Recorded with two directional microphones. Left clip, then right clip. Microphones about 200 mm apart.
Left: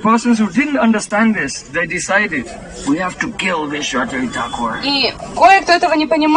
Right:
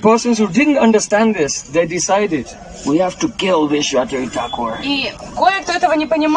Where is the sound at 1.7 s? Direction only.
30° right (ahead or behind).